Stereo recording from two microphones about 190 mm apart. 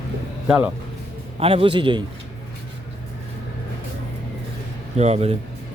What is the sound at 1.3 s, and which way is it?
Speech, 30° right (ahead or behind).